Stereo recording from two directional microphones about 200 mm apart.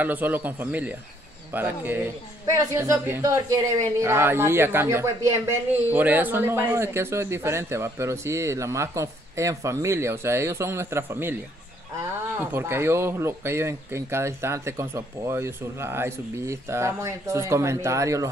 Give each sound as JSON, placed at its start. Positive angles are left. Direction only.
{"t": 0.0, "sound": "speech", "side_deg": -10}